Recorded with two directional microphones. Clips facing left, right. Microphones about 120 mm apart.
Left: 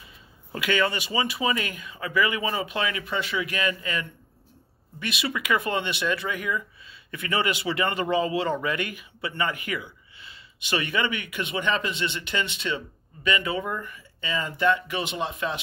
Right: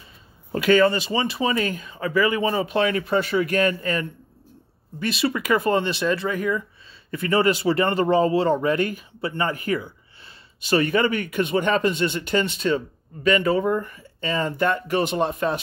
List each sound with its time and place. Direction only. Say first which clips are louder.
0.5 s speech: right 8 dB; 40° right (ahead or behind)